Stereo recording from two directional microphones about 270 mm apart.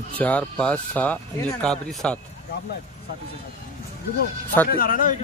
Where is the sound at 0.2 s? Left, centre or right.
Centre.